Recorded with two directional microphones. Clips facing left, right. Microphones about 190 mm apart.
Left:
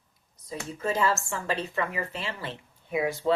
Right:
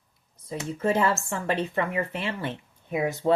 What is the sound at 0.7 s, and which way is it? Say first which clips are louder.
Speech: right 3 dB; 55° right (ahead or behind).